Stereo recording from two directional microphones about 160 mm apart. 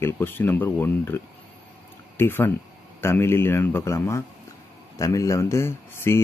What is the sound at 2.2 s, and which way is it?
A man's voice, 15° left (ahead or behind).